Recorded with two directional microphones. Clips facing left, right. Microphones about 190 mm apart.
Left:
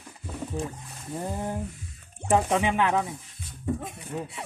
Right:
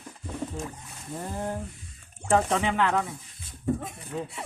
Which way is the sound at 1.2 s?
15° left (ahead or behind).